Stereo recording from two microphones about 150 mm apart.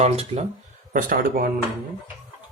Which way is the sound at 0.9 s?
70° right (ahead or behind).